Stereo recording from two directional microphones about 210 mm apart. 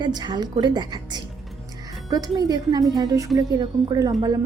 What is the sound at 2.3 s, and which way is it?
Speech, 20° right (ahead or behind).